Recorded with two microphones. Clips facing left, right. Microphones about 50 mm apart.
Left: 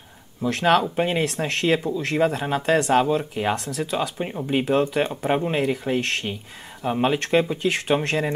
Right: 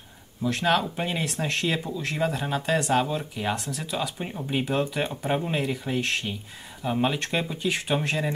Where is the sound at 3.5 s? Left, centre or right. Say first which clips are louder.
Left 5 dB; left.